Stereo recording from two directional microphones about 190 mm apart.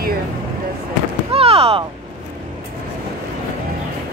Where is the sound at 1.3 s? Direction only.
30° right (ahead or behind).